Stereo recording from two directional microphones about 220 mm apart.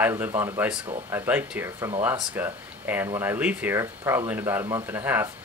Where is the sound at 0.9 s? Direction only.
25° right (ahead or behind).